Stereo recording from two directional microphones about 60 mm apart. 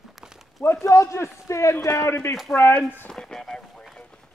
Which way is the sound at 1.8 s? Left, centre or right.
Left.